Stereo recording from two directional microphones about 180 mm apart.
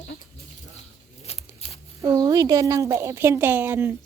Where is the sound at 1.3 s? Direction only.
35° left (ahead or behind).